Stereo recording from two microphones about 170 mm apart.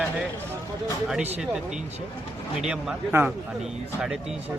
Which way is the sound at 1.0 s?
5° right (ahead or behind).